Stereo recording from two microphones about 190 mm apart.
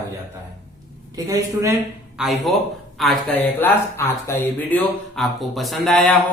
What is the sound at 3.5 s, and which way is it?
Speech, 10° left (ahead or behind).